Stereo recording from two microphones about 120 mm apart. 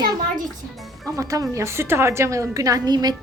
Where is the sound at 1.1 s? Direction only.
30° right (ahead or behind).